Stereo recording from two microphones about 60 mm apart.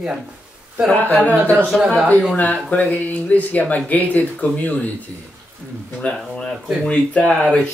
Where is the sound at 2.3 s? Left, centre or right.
Left.